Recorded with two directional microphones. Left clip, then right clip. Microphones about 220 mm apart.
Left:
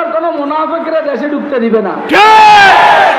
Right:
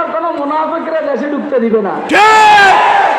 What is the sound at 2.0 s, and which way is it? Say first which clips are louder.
Speech: left 3 dB; 5° right (ahead or behind).